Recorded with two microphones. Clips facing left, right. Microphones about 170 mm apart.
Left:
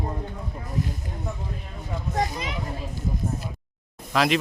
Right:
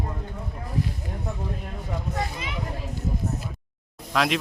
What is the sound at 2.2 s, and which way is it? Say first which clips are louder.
Speech: left 8 dB; 40° left (ahead or behind).